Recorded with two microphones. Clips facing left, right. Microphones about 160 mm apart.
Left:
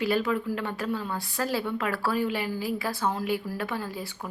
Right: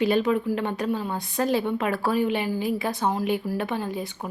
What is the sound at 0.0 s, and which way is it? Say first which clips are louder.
Speech: right 4 dB; 20° right (ahead or behind).